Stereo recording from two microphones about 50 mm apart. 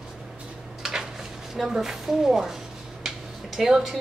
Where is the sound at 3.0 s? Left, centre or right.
Centre.